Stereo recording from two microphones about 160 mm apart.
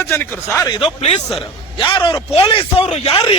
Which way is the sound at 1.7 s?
30° left (ahead or behind).